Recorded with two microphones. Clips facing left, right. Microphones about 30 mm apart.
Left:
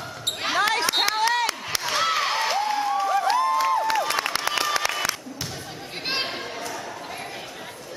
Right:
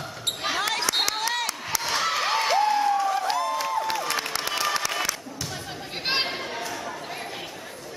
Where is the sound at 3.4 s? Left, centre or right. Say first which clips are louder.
Left 5 dB; left.